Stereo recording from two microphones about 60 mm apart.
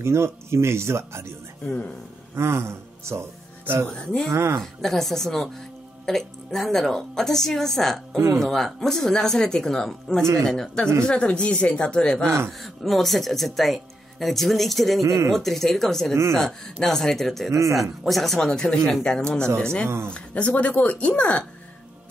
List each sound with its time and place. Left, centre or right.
0.0 s speech: right
2.3 s speech: right
3.8 s a woman's voice: centre
4.3 s speech: right
4.6 s a woman's voice: centre
15.0 s speech: right
15.2 s a woman's voice: centre
17.5 s speech: right
18.0 s a woman's voice: centre